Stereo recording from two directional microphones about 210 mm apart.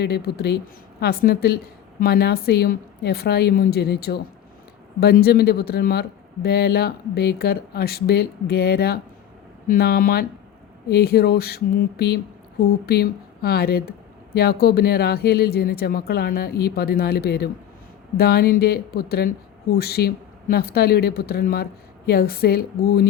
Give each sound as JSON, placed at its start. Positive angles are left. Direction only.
{"t": 0.0, "sound": "speech", "side_deg": 50}